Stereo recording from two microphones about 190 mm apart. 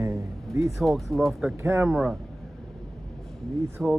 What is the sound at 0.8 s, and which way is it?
Speech, centre (ahead or behind).